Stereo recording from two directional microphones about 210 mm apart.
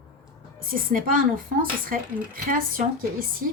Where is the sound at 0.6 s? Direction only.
40° right (ahead or behind).